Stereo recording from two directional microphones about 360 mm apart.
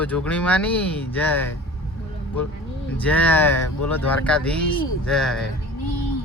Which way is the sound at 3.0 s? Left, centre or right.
Centre.